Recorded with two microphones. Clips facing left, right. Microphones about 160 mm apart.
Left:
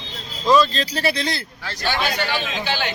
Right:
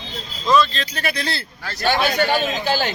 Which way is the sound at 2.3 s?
40° right (ahead or behind).